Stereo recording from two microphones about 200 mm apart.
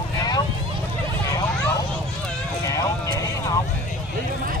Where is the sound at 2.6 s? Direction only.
15° left (ahead or behind).